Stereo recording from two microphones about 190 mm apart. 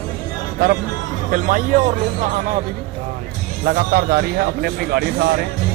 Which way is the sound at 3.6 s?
55° right (ahead or behind).